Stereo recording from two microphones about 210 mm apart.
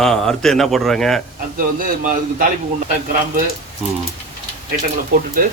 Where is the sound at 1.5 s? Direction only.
40° right (ahead or behind).